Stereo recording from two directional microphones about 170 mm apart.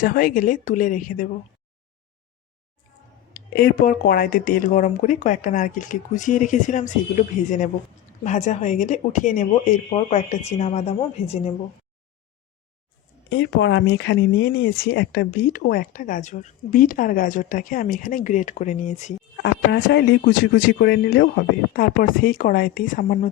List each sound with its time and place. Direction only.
0.0 s speech: 55° left (ahead or behind)
3.5 s speech: 65° left (ahead or behind); by 11.5 s 40° left (ahead or behind)
13.3 s speech: 90° left; by 19.1 s 40° left (ahead or behind)
19.4 s speech: 90° left
20.2 s speech: 65° left (ahead or behind)